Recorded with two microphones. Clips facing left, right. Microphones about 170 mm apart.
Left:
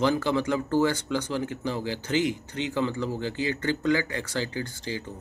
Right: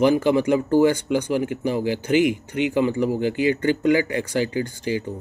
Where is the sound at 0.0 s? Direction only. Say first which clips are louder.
Right 7 dB; 15° right (ahead or behind).